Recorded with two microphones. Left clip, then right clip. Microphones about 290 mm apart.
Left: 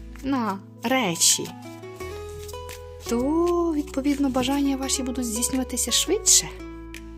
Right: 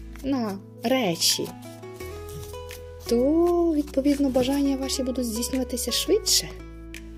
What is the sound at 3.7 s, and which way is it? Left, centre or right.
Speech, centre.